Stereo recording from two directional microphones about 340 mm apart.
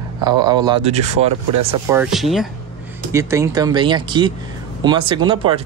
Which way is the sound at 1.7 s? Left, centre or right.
Centre.